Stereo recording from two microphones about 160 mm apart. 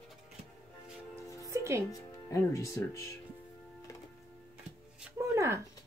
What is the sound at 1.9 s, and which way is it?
Speech, 20° left (ahead or behind).